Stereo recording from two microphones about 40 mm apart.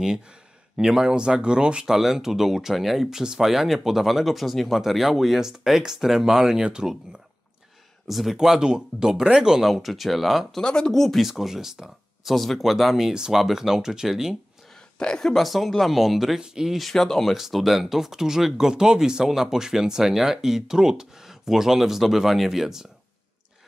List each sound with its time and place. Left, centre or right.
0.7 s speech: centre
1.9 s speech: centre
8.1 s speech: centre
8.4 s speech: centre
10.6 s speech: left
10.9 s speech: centre
11.2 s speech: centre
12.3 s speech: centre
15.0 s a woman's voice: centre
15.3 s speech: centre
16.3 s speech: centre
16.9 s speech: centre